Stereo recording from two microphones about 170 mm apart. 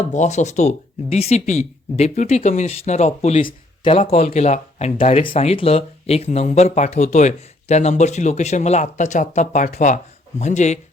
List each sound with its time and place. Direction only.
0.0 s speech: 45° left (ahead or behind)